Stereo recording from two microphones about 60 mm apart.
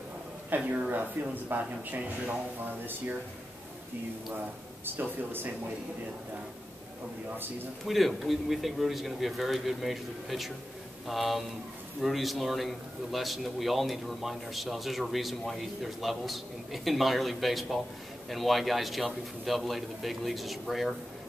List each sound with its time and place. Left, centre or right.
0.7 s speech: right
4.8 s speech: right
7.8 s a man's voice: centre